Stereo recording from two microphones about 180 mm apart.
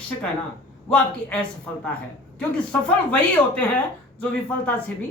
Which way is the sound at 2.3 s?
5° left (ahead or behind).